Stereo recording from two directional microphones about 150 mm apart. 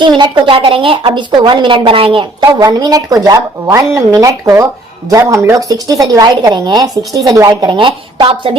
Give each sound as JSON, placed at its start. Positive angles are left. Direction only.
{"t": 0.2, "sound": "a woman's voice", "side_deg": -30}
{"t": 2.4, "sound": "speech", "side_deg": -25}